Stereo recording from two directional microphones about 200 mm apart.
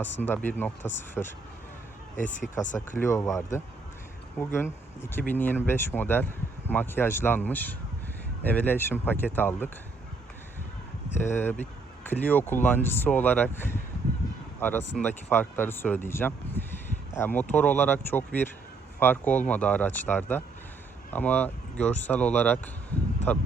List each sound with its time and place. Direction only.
0.0 s speech: 10° left (ahead or behind)
2.3 s speech: 40° left (ahead or behind)
2.8 s speech: 10° left (ahead or behind)
11.1 s speech: 10° left (ahead or behind)